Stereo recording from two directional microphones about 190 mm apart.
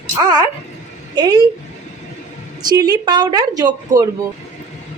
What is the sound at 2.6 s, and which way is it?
A woman's voice, 20° right (ahead or behind).